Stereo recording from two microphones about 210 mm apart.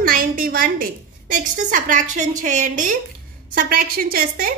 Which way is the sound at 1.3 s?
40° right (ahead or behind).